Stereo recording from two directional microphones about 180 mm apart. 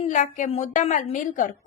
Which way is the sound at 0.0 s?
45° left (ahead or behind).